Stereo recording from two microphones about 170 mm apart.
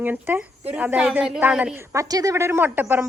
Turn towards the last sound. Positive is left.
turn(degrees=-10)  # may be behind; listen again after turning